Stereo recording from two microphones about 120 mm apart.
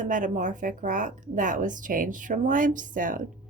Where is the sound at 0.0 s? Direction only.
90° right.